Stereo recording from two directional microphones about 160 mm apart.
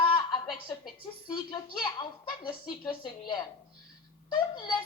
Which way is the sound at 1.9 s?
30° left (ahead or behind).